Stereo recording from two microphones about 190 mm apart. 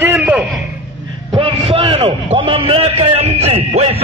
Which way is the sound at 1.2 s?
30° right (ahead or behind).